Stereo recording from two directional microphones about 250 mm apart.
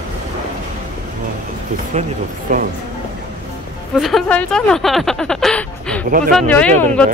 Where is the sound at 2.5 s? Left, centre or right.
Right.